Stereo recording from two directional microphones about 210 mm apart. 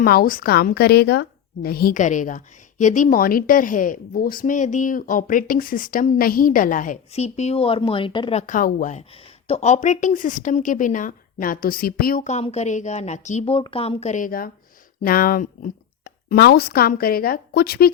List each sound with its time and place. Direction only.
0.0 s a woman's voice: 45° left (ahead or behind)